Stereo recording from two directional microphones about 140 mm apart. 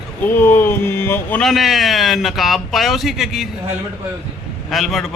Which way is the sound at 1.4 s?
Centre (ahead or behind).